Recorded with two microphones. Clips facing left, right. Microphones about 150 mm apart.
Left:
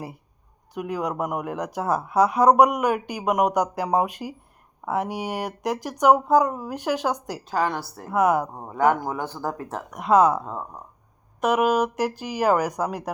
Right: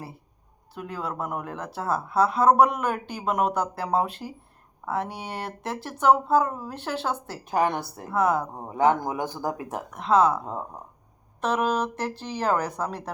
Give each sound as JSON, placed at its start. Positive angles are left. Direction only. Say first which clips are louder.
{"t": 0.7, "sound": "speech", "louder": "left 5 dB", "side_deg": 15}
{"t": 7.5, "sound": "a woman's voice", "louder": "right 1 dB", "side_deg": -20}
{"t": 8.1, "sound": "speech", "louder": "left 3 dB", "side_deg": 10}
{"t": 8.5, "sound": "a woman's voice", "louder": "left 1 dB", "side_deg": -20}
{"t": 9.9, "sound": "speech", "louder": "left 3 dB", "side_deg": 15}